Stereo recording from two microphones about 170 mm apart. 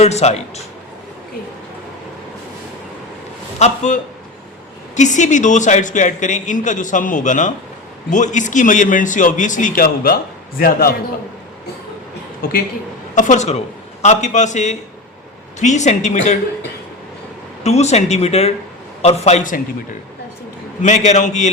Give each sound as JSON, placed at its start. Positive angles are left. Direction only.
{"t": 0.0, "sound": "speech", "side_deg": 40}
{"t": 3.6, "sound": "a man's voice", "side_deg": 45}
{"t": 12.4, "sound": "speech", "side_deg": 65}
{"t": 13.1, "sound": "speech", "side_deg": 45}
{"t": 17.6, "sound": "speech", "side_deg": 40}
{"t": 20.8, "sound": "speech", "side_deg": 45}